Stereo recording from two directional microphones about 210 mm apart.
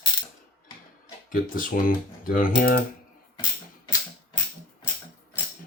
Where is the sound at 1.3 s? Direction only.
40° left (ahead or behind).